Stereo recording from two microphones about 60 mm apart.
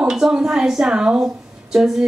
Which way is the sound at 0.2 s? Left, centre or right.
Centre.